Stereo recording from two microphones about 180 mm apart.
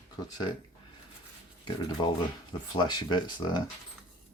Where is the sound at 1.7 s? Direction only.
25° left (ahead or behind).